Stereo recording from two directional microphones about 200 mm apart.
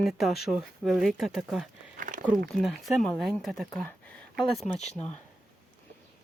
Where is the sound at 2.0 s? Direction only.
40° right (ahead or behind).